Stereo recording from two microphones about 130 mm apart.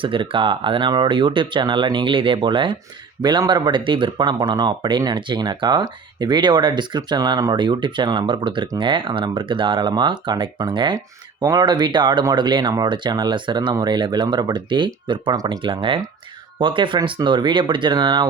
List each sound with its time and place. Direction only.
0.0 s speech: 40° right (ahead or behind)